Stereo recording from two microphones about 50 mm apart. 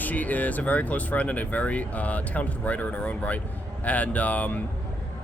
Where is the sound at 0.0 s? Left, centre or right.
Left.